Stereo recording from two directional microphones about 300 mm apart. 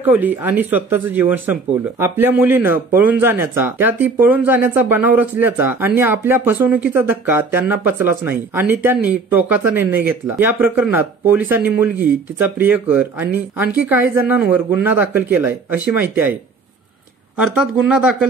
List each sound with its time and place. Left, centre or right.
0.0 s a woman's voice: centre
17.4 s a woman's voice: centre